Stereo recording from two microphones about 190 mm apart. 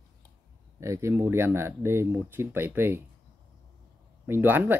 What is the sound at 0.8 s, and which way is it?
Speech, 15° right (ahead or behind).